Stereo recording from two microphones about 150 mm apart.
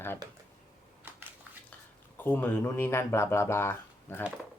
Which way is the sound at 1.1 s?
15° right (ahead or behind).